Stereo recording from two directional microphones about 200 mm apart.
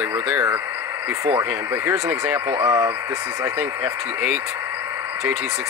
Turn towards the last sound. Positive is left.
turn(degrees=-5)  # may be behind; listen again after turning